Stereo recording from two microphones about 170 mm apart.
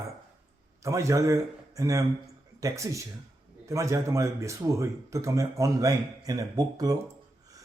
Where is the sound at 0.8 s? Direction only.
15° right (ahead or behind).